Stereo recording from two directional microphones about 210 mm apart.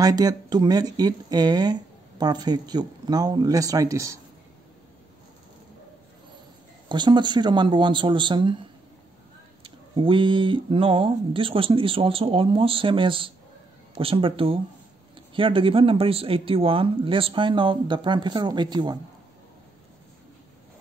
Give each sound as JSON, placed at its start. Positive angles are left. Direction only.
{"t": 0.0, "sound": "speech", "side_deg": -15}
{"t": 6.9, "sound": "speech", "side_deg": -20}
{"t": 9.6, "sound": "speech", "side_deg": -25}